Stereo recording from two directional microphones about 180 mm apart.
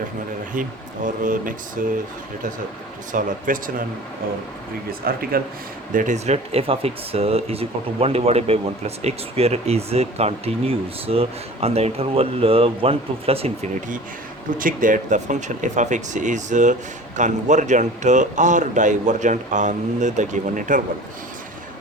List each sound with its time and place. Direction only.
0.5 s a man's voice: 45° right (ahead or behind)
3.1 s a man's voice: 45° right (ahead or behind)
4.9 s speech: 55° right (ahead or behind)
5.9 s a man's voice: 45° right (ahead or behind)